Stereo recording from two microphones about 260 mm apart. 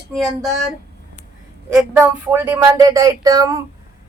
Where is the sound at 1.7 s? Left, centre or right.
Centre.